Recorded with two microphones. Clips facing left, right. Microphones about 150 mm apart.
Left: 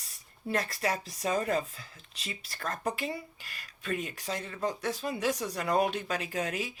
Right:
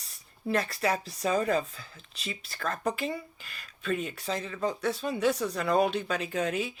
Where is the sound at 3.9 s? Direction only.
30° right (ahead or behind).